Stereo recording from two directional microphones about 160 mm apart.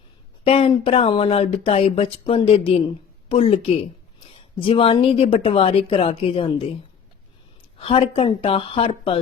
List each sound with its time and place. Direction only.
0.4 s speech: 40° left (ahead or behind)
7.8 s speech: 35° left (ahead or behind)